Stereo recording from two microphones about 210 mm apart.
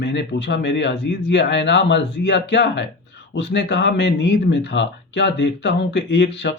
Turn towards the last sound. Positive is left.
turn(degrees=55)  # may be behind; listen again after turning